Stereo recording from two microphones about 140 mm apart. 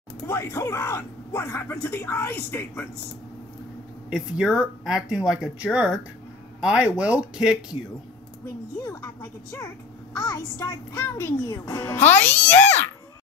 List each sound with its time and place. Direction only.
0.3 s a child's voice: 20° left (ahead or behind)
4.1 s speech: 5° right (ahead or behind)
8.7 s a child's voice: 25° left (ahead or behind)